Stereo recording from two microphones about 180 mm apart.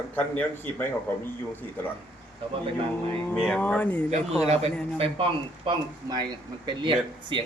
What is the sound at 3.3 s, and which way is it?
Speech, 5° left (ahead or behind).